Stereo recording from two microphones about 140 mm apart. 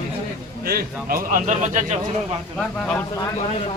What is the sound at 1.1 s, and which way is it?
Speech, 80° right.